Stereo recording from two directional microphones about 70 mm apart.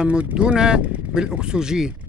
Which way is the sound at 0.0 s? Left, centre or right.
Centre.